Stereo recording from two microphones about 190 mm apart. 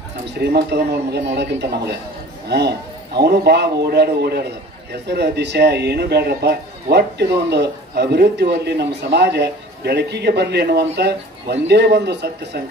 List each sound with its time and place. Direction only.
0.4 s speech: 60° right (ahead or behind)